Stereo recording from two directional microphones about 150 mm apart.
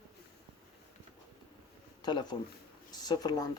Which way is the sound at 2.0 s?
30° left (ahead or behind).